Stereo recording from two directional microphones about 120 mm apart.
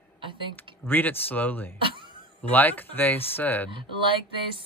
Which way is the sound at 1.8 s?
45° right (ahead or behind).